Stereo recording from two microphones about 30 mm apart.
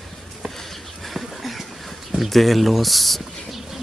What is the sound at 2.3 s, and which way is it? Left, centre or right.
Speech, centre.